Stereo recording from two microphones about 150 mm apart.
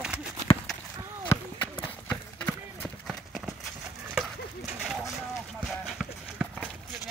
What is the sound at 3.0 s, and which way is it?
Clip-clop, centre (ahead or behind).